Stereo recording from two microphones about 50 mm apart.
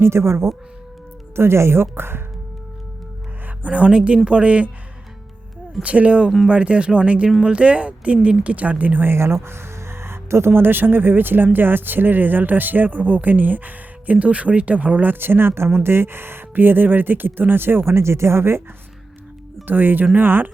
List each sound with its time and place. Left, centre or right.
0.0 s speech: right
3.6 s speech: right
5.8 s speech: right
9.1 s speech: right
19.6 s speech: right